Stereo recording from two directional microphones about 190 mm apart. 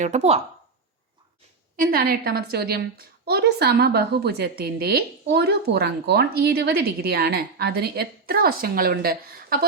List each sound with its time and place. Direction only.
0.0 s speech: 35° right (ahead or behind)
1.7 s a woman's voice: 50° right (ahead or behind)